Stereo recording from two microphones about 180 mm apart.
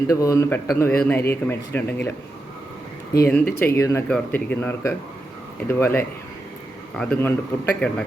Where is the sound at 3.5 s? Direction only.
15° left (ahead or behind).